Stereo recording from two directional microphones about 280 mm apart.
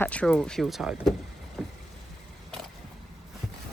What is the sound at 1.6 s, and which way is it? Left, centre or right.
Vehicle, centre.